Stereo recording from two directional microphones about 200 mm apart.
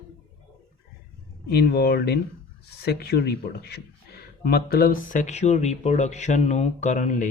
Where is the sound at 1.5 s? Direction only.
50° left (ahead or behind).